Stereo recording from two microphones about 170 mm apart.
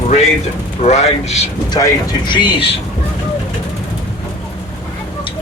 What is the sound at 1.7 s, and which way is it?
Speech, 25° left (ahead or behind).